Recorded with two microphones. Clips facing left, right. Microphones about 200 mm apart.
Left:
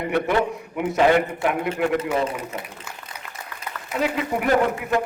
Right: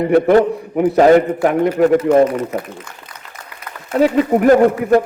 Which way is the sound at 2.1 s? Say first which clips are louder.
Right 12 dB; 5° left (ahead or behind).